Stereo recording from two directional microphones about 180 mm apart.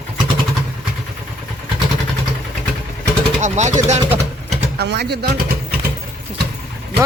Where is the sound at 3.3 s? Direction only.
40° right (ahead or behind).